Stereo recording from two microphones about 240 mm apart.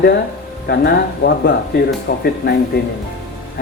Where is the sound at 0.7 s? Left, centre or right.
Left.